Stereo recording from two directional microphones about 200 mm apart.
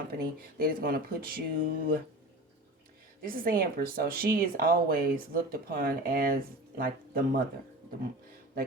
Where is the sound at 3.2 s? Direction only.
45° right (ahead or behind).